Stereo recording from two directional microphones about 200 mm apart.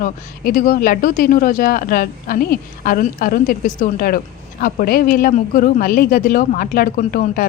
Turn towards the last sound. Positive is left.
turn(degrees=45)  # may be behind; listen again after turning